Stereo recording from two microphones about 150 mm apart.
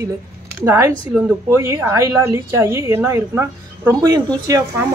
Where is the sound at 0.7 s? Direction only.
20° right (ahead or behind).